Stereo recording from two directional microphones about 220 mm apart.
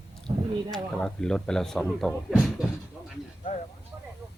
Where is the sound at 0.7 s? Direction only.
Centre (ahead or behind).